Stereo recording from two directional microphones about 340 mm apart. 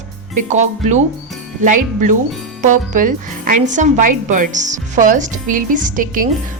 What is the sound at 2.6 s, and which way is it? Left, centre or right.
Speech, right.